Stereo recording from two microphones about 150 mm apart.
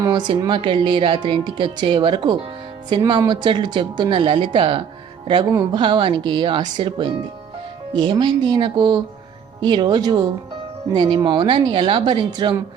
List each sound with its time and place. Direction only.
0.0 s speech: 30° right (ahead or behind)